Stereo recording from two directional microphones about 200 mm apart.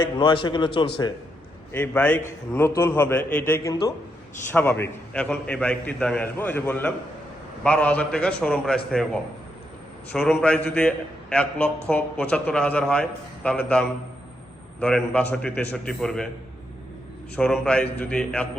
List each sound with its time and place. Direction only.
0.2 s a man's voice: 25° left (ahead or behind)
1.7 s a man's voice: 10° left (ahead or behind)
10.1 s a man's voice: 5° left (ahead or behind)
17.3 s a man's voice: 5° left (ahead or behind)